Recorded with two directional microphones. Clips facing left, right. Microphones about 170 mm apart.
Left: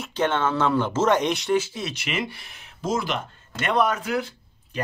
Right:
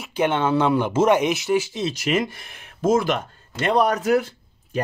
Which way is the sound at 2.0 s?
45° right (ahead or behind).